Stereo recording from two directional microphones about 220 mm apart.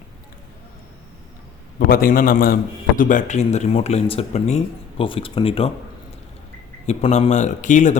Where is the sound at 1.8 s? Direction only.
40° left (ahead or behind); by 5.7 s 25° left (ahead or behind).